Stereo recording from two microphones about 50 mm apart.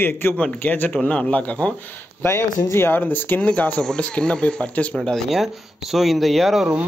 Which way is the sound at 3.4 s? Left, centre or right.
Left.